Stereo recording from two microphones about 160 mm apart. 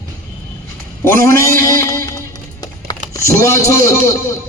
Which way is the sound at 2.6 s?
20° left (ahead or behind).